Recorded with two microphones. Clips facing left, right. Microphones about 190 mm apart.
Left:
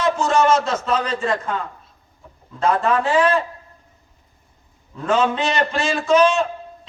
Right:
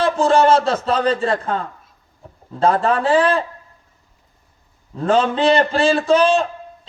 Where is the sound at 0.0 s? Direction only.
30° right (ahead or behind).